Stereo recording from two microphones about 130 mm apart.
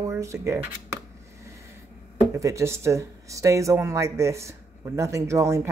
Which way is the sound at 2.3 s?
25° right (ahead or behind).